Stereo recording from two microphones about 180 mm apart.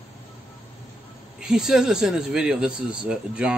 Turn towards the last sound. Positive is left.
turn(degrees=-5)  # may be behind; listen again after turning